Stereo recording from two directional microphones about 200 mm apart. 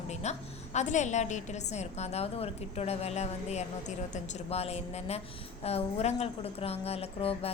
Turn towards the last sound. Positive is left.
turn(degrees=30)  # may be behind; listen again after turning